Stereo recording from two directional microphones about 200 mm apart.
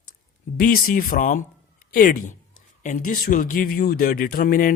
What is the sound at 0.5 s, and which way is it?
A woman's voice, 45° left (ahead or behind).